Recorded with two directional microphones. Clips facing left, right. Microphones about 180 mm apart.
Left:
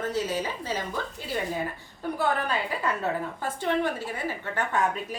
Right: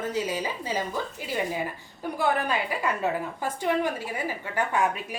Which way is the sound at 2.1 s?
10° right (ahead or behind).